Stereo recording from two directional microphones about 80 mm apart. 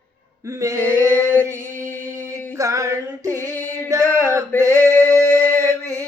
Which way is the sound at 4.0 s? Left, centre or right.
Left.